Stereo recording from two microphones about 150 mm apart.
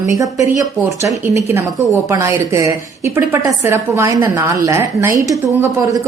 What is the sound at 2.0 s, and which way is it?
A woman's voice, 20° right (ahead or behind).